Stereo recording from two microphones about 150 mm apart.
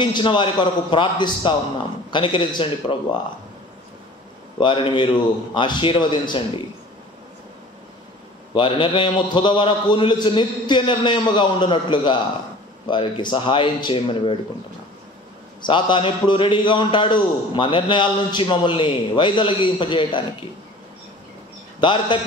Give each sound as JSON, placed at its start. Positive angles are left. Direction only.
{"t": 0.0, "sound": "a man's voice", "side_deg": 30}
{"t": 4.6, "sound": "a man's voice", "side_deg": 30}
{"t": 8.5, "sound": "a man's voice", "side_deg": 35}
{"t": 15.6, "sound": "a man's voice", "side_deg": 30}
{"t": 21.7, "sound": "a man's voice", "side_deg": 30}